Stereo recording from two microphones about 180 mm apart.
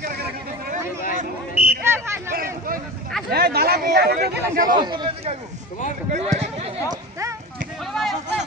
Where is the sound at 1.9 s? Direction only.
15° right (ahead or behind).